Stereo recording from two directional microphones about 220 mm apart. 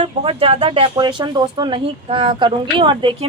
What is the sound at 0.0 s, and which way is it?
A woman's voice, 25° right (ahead or behind).